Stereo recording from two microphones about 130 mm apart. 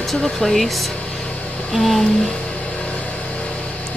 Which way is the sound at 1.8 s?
Centre (ahead or behind).